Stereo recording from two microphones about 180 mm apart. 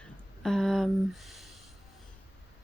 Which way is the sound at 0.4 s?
Centre (ahead or behind).